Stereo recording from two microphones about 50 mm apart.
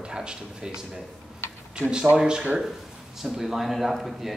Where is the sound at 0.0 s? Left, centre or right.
Centre.